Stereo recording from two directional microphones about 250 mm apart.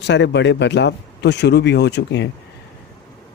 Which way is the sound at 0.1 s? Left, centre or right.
Left.